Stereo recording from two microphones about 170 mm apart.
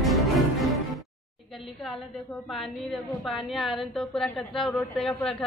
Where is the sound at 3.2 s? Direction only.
Centre (ahead or behind).